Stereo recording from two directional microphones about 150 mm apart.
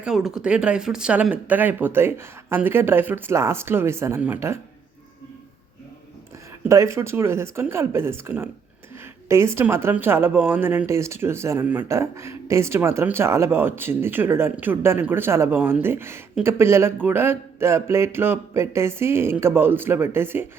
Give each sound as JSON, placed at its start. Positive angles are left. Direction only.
{"t": 0.0, "sound": "speech", "side_deg": -5}
{"t": 6.7, "sound": "speech", "side_deg": -20}